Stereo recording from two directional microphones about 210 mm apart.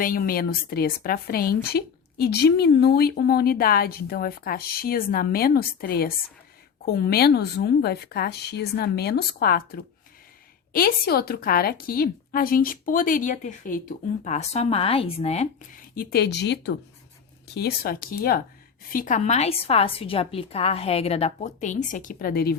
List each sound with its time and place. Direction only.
0.0 s a woman's voice: 45° left (ahead or behind)
16.0 s a woman's voice: 50° left (ahead or behind)